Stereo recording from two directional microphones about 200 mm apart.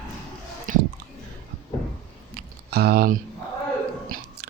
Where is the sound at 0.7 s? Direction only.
40° right (ahead or behind).